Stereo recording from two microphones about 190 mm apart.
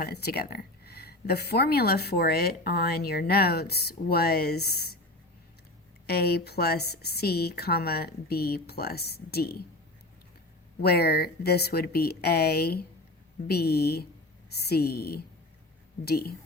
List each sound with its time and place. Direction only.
0.0 s speech: 55° left (ahead or behind)
6.1 s speech: 55° left (ahead or behind)
10.8 s speech: 55° left (ahead or behind)